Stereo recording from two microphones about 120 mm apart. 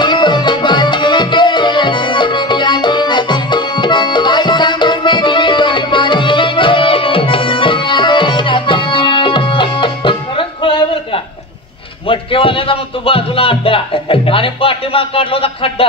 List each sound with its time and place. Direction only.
0.0 s music: 40° left (ahead or behind)
12.1 s speech: 50° left (ahead or behind)